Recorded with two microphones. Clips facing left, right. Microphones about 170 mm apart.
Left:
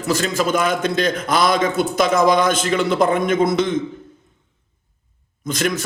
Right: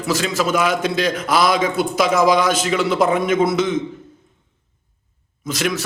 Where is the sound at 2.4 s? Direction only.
50° left (ahead or behind).